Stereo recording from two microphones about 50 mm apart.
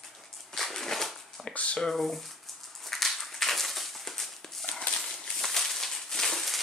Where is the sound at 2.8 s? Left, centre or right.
Centre.